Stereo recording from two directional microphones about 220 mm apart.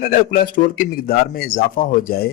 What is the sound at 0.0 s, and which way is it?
A man's voice, 40° left (ahead or behind).